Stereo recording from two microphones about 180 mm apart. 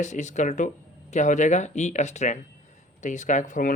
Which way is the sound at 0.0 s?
40° left (ahead or behind).